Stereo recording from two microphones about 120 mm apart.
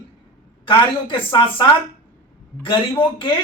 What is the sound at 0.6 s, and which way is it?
Speech, 45° left (ahead or behind).